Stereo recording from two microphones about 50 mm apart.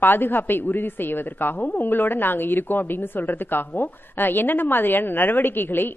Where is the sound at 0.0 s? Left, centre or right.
Left.